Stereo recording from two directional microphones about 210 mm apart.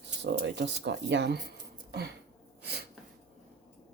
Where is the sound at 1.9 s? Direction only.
50° right (ahead or behind).